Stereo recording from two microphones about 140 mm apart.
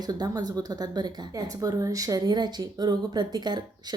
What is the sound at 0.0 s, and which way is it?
Speech, 30° right (ahead or behind).